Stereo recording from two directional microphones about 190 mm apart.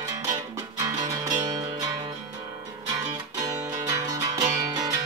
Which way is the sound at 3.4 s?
20° right (ahead or behind).